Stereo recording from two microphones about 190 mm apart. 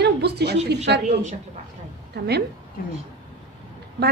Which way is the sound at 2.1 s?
60° right (ahead or behind).